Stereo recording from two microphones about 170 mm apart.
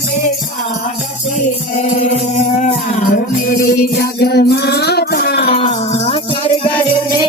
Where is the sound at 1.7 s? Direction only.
45° left (ahead or behind); by 5.5 s 70° left (ahead or behind).